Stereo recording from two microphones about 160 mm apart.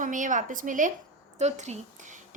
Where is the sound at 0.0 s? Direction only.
55° right (ahead or behind).